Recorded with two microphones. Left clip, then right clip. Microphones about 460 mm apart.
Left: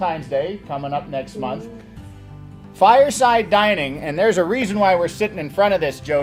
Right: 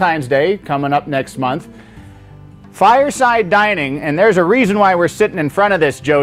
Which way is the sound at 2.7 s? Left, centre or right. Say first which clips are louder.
Right 2 dB; right.